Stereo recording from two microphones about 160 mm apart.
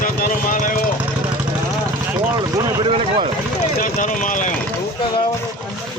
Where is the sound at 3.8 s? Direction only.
55° left (ahead or behind).